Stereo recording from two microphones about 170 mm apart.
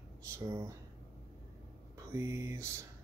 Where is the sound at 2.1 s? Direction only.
15° right (ahead or behind).